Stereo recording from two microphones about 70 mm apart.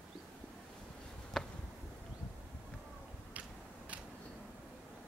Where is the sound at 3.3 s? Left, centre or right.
Centre.